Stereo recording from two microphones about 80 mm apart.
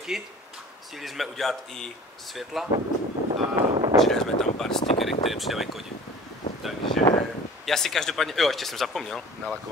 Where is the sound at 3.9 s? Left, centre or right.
Centre.